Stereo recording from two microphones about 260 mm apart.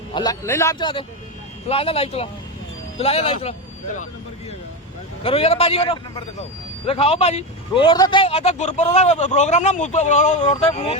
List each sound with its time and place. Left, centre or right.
0.1 s a man's voice: centre
5.2 s speech: left